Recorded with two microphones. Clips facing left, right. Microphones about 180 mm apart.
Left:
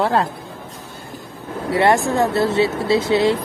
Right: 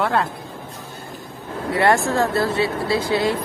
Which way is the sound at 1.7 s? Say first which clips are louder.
Left 2 dB; 25° left (ahead or behind).